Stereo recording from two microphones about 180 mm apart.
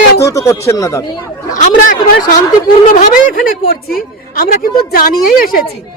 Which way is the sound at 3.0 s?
55° left (ahead or behind).